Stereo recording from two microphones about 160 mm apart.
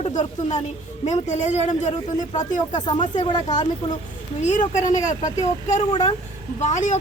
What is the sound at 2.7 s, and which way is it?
Speech, 25° left (ahead or behind).